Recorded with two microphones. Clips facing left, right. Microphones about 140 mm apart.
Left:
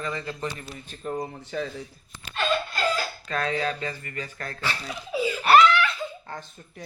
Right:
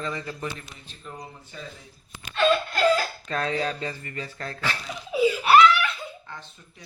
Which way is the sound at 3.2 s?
30° right (ahead or behind).